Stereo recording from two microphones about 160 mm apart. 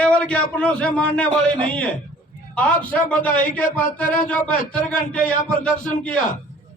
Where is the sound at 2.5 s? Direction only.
10° left (ahead or behind).